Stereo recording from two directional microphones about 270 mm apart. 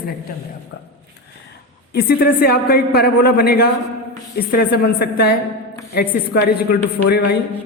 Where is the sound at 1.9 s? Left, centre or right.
Left.